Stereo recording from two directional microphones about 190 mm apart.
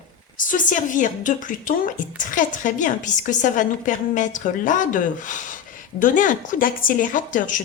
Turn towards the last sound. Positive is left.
turn(degrees=45)  # may be behind; listen again after turning